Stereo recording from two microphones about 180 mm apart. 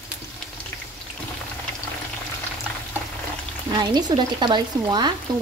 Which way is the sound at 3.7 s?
25° right (ahead or behind).